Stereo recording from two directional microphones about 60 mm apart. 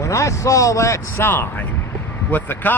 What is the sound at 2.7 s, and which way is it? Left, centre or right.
Speech, left.